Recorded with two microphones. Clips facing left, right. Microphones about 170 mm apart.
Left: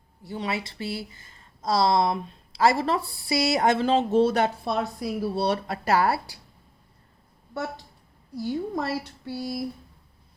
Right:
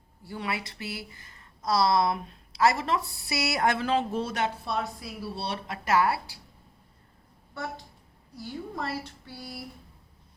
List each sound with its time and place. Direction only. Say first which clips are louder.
0.3 s speech: left 3 dB; 25° left (ahead or behind)
4.4 s a woman's voice: left 4 dB; 45° left (ahead or behind)
8.4 s a woman's voice: left 7 dB; 40° left (ahead or behind)